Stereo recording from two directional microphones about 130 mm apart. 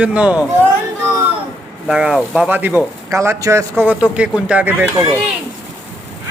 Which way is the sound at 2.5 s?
15° right (ahead or behind).